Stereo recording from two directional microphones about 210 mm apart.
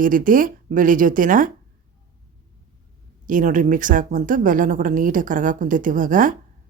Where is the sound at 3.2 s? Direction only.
40° right (ahead or behind).